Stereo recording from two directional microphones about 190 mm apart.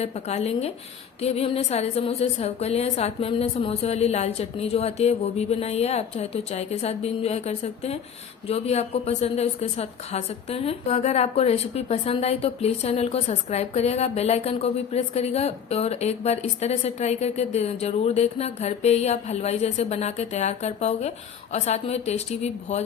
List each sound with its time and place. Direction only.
0.0 s a woman's voice: 35° left (ahead or behind)